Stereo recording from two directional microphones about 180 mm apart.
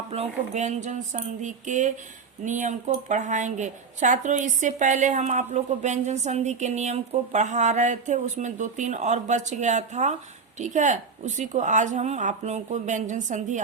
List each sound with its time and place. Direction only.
0.1 s a woman's voice: 40° right (ahead or behind)